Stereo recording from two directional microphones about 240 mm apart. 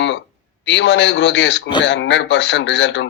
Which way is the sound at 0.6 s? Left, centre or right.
Left.